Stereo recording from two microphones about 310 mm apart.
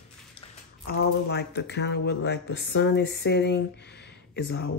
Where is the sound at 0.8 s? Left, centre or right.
Left.